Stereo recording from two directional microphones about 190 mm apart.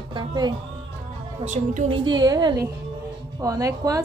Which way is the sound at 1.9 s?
25° right (ahead or behind).